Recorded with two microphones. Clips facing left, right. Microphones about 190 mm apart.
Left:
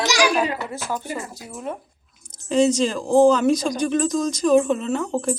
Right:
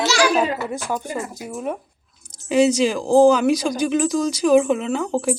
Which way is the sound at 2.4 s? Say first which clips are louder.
Right 2 dB; 10° right (ahead or behind).